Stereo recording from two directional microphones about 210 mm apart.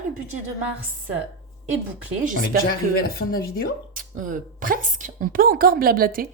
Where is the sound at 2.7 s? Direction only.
45° left (ahead or behind).